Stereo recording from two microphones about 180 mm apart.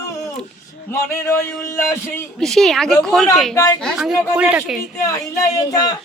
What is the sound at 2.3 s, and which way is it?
Speech, centre (ahead or behind).